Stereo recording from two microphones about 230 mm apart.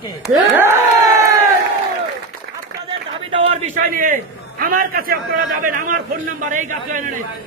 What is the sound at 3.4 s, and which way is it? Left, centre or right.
A man's voice, right.